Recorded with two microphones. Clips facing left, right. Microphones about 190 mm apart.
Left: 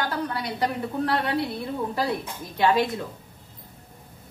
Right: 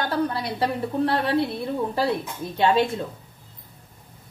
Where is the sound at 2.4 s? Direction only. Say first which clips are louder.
Right 7 dB; 30° right (ahead or behind).